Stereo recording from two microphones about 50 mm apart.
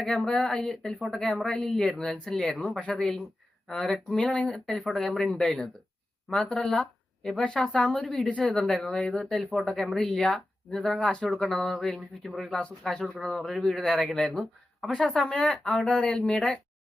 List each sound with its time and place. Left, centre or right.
0.0 s speech: centre
4.6 s speech: centre
6.6 s speech: centre
7.3 s speech: left
8.2 s speech: left
8.5 s speech: centre
11.0 s speech: centre
11.3 s speech: centre
12.8 s speech: centre
13.2 s speech: centre
14.9 s speech: centre
15.3 s speech: left
15.6 s speech: centre